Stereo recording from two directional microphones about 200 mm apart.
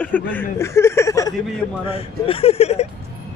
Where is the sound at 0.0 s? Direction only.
10° left (ahead or behind).